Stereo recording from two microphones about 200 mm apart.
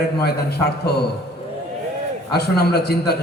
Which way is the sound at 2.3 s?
55° left (ahead or behind).